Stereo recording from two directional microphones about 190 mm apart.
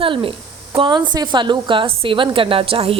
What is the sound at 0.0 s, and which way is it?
A woman's voice, 25° right (ahead or behind).